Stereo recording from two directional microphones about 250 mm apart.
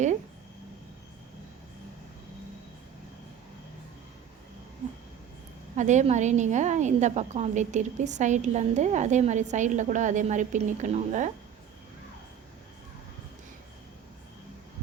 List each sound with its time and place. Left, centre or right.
5.7 s a woman's voice: right